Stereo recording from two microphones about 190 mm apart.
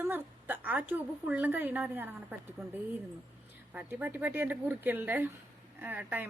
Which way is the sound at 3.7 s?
10° right (ahead or behind).